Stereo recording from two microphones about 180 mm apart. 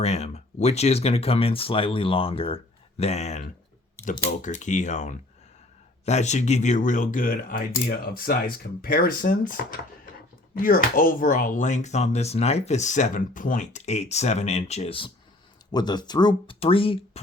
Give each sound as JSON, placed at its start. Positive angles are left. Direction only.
{"t": 0.0, "sound": "speech", "side_deg": 35}
{"t": 10.6, "sound": "speech", "side_deg": 50}